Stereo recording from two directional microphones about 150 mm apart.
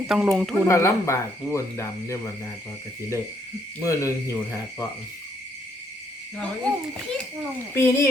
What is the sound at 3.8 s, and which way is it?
Speech, 20° left (ahead or behind).